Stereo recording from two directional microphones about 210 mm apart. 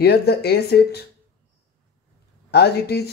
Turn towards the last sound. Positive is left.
turn(degrees=50)  # may be behind; listen again after turning